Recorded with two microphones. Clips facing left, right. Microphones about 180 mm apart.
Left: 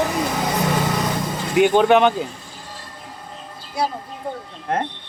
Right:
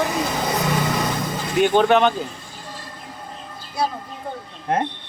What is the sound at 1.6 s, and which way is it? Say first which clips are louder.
Speech: left 2 dB; 15° left (ahead or behind).